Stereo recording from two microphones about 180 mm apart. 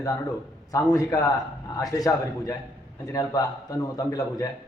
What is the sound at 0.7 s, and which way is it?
A man's voice, 20° left (ahead or behind).